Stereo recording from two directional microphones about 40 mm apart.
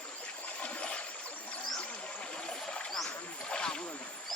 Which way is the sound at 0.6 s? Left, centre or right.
Left.